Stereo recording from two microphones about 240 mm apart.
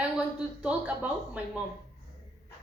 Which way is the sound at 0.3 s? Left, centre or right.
Centre.